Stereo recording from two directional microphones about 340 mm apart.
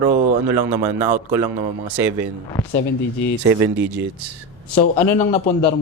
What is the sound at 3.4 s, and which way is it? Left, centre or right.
Speech, centre.